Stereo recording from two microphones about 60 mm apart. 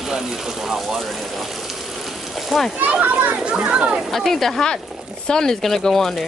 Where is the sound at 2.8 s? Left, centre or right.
Right.